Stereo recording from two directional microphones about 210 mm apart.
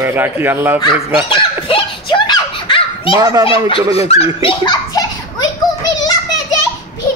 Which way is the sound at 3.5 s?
25° left (ahead or behind).